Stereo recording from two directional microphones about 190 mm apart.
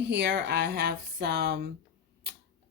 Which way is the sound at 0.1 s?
60° right (ahead or behind).